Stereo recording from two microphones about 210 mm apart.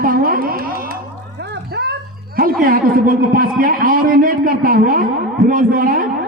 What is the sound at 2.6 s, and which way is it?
A man's voice, 45° right (ahead or behind).